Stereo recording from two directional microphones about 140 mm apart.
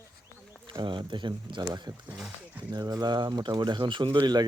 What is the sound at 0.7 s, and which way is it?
Speech, 35° right (ahead or behind).